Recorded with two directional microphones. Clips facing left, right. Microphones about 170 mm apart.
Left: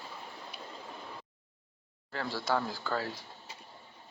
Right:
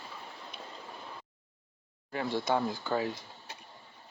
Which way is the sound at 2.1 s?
20° right (ahead or behind).